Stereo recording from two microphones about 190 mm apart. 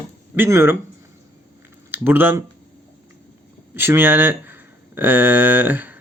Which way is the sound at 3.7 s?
10° right (ahead or behind).